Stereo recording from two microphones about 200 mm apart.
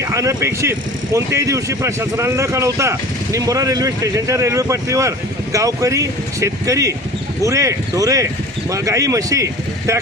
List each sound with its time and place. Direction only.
0.0 s speech: 15° right (ahead or behind)